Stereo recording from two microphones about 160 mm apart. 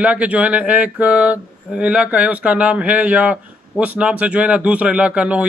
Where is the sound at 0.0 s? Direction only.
10° right (ahead or behind).